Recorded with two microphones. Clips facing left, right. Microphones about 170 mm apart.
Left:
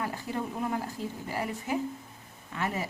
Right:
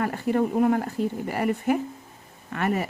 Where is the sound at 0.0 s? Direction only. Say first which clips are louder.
Right 10 dB; 60° right (ahead or behind).